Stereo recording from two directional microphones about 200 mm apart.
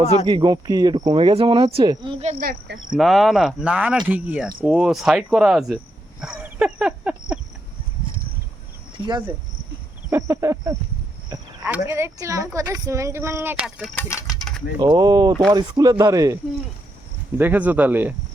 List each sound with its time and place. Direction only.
0.3 s speech: 20° right (ahead or behind)
2.2 s speech: 45° right (ahead or behind)
2.9 s cricket: centre (ahead or behind)
4.6 s speech: 5° right (ahead or behind)
10.1 s speech: 15° right (ahead or behind)
13.9 s speech: 15° left (ahead or behind)
14.8 s speech: 20° right (ahead or behind)
15.3 s cricket: centre (ahead or behind)
15.5 s speech: 20° right (ahead or behind)